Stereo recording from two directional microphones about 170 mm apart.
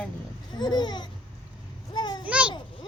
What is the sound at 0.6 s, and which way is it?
Babbling, 25° left (ahead or behind).